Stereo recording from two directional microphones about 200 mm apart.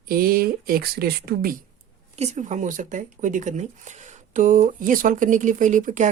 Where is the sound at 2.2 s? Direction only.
35° right (ahead or behind).